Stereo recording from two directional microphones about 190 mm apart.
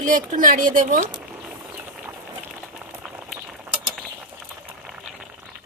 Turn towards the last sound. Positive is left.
turn(degrees=0)  # may be behind; listen again after turning